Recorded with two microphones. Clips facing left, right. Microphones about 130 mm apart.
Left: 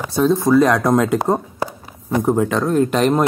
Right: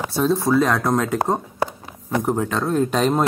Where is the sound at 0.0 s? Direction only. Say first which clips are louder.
Left 3 dB; centre (ahead or behind).